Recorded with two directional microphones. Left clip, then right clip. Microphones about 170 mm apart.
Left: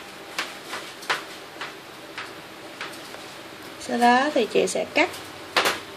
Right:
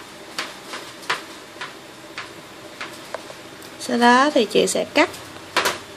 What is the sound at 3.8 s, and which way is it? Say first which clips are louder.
Speech: right 4 dB; 25° right (ahead or behind).